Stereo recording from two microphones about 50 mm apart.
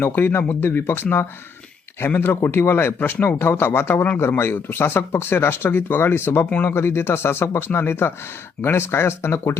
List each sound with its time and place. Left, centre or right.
0.0 s speech: left